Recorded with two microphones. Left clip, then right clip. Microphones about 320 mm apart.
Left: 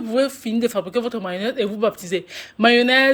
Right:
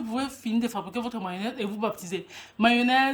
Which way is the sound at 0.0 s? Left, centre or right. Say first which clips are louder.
Left 11 dB; centre.